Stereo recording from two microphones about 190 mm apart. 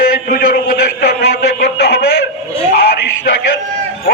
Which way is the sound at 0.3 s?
50° left (ahead or behind).